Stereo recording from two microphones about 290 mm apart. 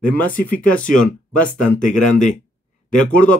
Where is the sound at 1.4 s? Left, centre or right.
Left.